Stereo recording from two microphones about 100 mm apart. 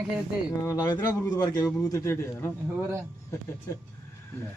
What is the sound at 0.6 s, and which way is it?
Speech, 30° left (ahead or behind).